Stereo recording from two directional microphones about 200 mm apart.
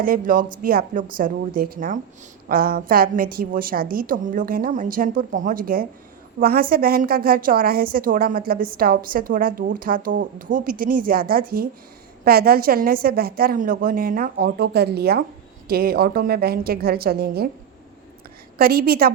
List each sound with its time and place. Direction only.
0.0 s a woman's voice: 45° right (ahead or behind)
18.5 s a woman's voice: 50° right (ahead or behind)